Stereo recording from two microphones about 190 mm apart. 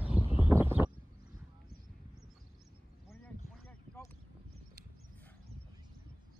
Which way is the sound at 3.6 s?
15° left (ahead or behind).